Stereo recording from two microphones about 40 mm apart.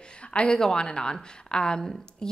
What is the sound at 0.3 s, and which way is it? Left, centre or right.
A woman's voice, left.